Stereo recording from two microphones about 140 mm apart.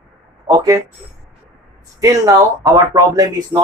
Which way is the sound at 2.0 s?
25° right (ahead or behind).